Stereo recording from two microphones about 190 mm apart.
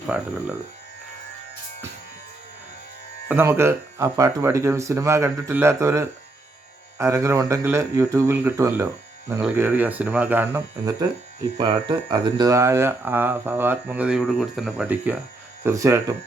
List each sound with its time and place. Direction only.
0.1 s speech: 5° right (ahead or behind)
3.2 s speech: 10° right (ahead or behind)
11.5 s speech: 25° right (ahead or behind)